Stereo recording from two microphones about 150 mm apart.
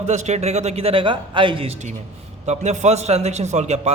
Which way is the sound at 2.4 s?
50° right (ahead or behind).